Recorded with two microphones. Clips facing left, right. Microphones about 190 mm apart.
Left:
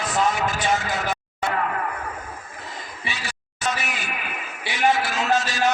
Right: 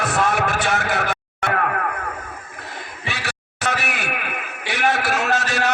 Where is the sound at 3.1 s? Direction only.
65° right (ahead or behind).